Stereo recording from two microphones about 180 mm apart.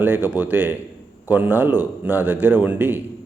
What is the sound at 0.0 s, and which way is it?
Speech, 10° right (ahead or behind).